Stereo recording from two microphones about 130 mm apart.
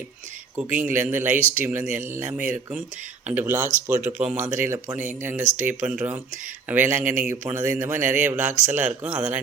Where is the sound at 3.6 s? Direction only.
75° right (ahead or behind).